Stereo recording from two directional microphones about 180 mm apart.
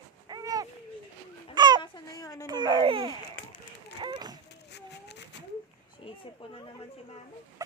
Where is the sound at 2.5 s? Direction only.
25° right (ahead or behind).